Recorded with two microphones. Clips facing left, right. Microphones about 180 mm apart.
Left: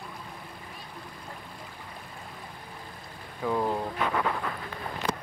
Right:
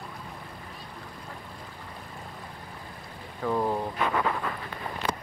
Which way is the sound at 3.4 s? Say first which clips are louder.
Right 1 dB; 5° right (ahead or behind).